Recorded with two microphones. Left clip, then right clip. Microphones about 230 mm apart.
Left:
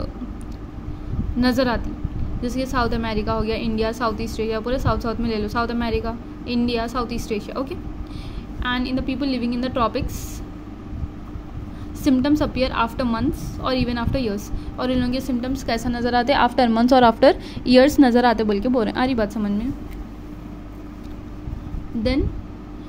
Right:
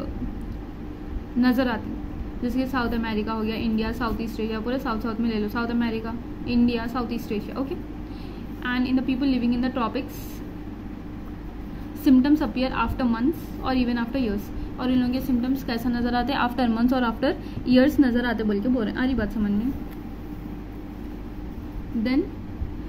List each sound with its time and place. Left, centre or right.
1.4 s a woman's voice: left
8.6 s a woman's voice: left
12.0 s a woman's voice: left